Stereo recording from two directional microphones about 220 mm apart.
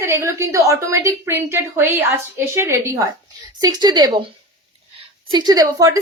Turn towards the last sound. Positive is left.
turn(degrees=-15)  # may be behind; listen again after turning